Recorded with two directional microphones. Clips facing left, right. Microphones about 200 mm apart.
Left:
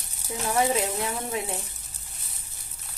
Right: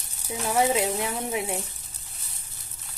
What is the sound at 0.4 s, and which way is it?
Speech, 15° right (ahead or behind).